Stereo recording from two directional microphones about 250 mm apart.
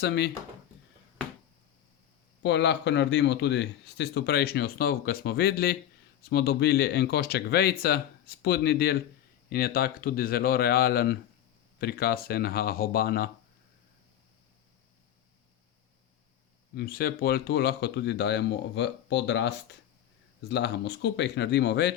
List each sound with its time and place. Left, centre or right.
0.0 s speech: left
2.4 s a man's voice: left
16.7 s a man's voice: left